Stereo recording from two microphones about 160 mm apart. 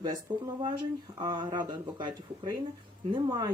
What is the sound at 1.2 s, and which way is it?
Speech, 25° right (ahead or behind).